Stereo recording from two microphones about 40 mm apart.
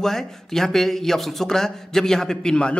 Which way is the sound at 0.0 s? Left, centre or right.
Centre.